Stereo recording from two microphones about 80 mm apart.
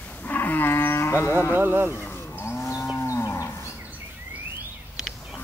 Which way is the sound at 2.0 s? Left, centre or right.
Left.